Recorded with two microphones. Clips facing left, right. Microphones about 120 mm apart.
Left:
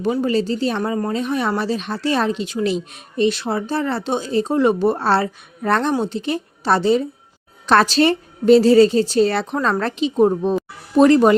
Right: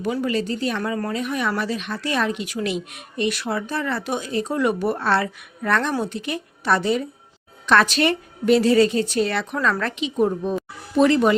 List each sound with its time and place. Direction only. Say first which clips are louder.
0.0 s speech: left 4 dB; 30° left (ahead or behind)